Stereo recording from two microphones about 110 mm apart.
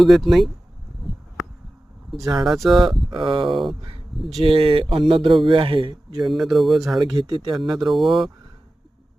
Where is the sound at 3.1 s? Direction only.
50° right (ahead or behind).